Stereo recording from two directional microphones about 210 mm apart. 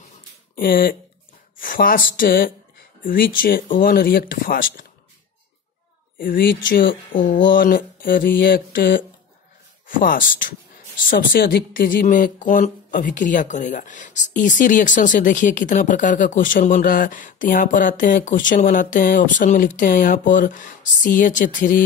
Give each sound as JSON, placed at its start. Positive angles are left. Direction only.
{"t": 0.6, "sound": "speech", "side_deg": 45}
{"t": 6.1, "sound": "speech", "side_deg": 45}